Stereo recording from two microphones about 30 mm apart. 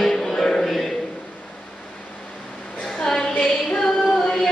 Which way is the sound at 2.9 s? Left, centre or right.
Left.